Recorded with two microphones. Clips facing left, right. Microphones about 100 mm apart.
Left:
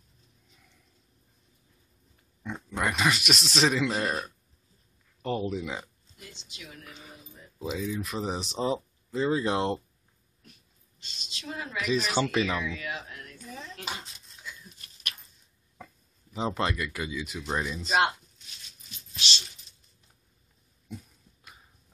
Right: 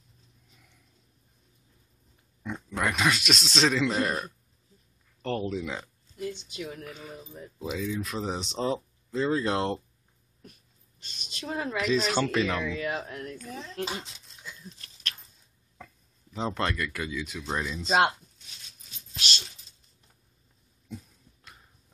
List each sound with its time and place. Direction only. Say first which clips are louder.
2.7 s speech: even; 5° left (ahead or behind)
6.3 s a woman's voice: right 9 dB; 50° right (ahead or behind)
7.5 s speech: even; centre (ahead or behind)
11.0 s a woman's voice: right 4 dB; 50° right (ahead or behind)
11.9 s speech: even; 5° left (ahead or behind)
12.6 s speech: right 4 dB; 40° right (ahead or behind)
15.0 s a sound: right 2 dB; 15° left (ahead or behind)
16.3 s speech: even; 5° left (ahead or behind)
19.1 s a sound: even; 45° right (ahead or behind)
20.9 s dog: right 1 dB; 5° left (ahead or behind)